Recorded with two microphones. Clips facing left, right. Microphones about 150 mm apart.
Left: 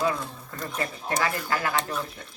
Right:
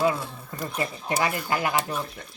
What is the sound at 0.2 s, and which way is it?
Speech, 10° right (ahead or behind).